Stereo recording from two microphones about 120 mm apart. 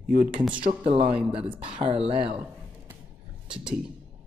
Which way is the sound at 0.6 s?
50° right (ahead or behind).